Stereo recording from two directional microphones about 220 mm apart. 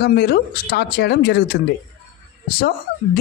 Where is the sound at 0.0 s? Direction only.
45° left (ahead or behind).